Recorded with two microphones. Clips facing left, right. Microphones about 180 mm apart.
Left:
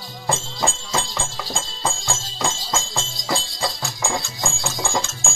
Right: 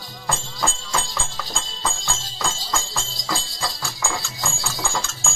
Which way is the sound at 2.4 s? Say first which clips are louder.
Left 2 dB; 20° left (ahead or behind).